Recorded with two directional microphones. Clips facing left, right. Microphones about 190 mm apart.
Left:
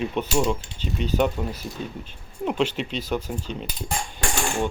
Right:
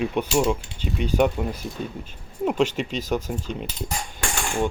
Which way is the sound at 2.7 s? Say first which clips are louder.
Right 2 dB; 45° right (ahead or behind).